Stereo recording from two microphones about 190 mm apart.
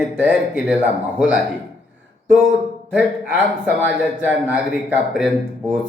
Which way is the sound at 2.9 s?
10° right (ahead or behind).